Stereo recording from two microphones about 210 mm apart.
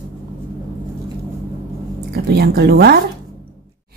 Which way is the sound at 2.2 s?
50° right (ahead or behind).